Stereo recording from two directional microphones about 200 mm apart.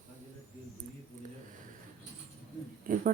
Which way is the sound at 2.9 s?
45° right (ahead or behind).